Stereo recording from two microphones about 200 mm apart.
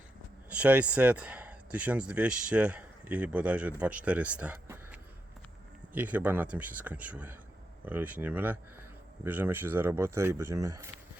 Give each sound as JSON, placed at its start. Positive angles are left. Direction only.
{"t": 0.5, "sound": "speech", "side_deg": -5}